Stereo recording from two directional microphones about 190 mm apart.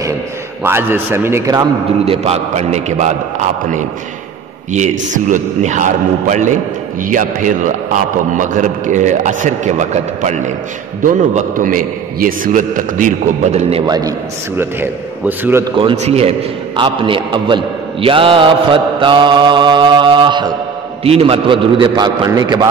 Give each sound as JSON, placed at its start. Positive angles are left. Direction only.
{"t": 0.7, "sound": "a man's voice", "side_deg": -10}
{"t": 2.2, "sound": "a man's voice", "side_deg": -35}
{"t": 4.7, "sound": "a man's voice", "side_deg": -40}
{"t": 13.8, "sound": "a man's voice", "side_deg": -20}
{"t": 15.7, "sound": "a man's voice", "side_deg": -25}